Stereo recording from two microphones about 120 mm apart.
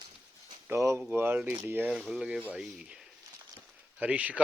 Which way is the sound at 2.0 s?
5° right (ahead or behind).